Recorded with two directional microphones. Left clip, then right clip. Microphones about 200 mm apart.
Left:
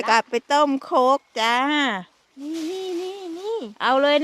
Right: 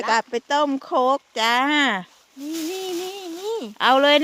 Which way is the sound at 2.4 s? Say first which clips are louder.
Right 1 dB; 30° right (ahead or behind).